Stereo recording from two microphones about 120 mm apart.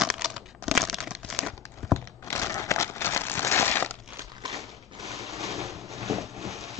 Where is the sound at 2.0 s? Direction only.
25° left (ahead or behind).